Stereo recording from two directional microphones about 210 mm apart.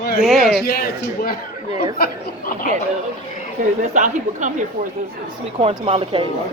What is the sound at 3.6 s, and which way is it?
A woman's voice, 35° right (ahead or behind).